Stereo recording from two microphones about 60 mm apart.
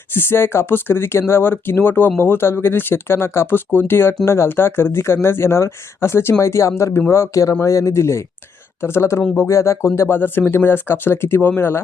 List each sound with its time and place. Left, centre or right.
0.1 s speech: left